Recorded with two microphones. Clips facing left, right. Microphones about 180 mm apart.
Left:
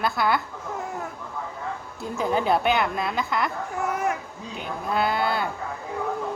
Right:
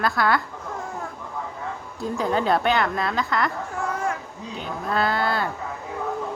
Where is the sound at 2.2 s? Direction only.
5° left (ahead or behind).